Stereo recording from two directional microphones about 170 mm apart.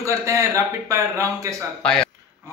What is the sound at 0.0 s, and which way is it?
A man's voice, 15° right (ahead or behind).